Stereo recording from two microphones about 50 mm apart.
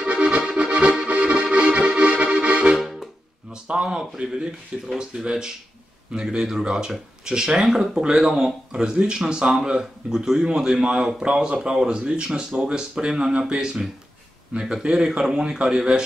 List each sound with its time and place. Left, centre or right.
0.0 s music: right
1.0 s accordion: right
2.8 s music: centre
3.6 s a man's voice: centre